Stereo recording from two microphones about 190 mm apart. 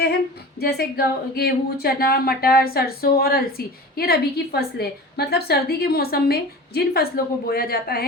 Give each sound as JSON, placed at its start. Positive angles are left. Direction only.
{"t": 0.6, "sound": "a woman's voice", "side_deg": 55}